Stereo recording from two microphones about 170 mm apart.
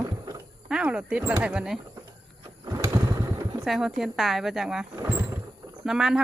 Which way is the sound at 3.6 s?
Centre (ahead or behind).